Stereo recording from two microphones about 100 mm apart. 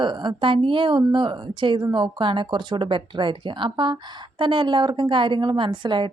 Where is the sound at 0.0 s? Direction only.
50° right (ahead or behind).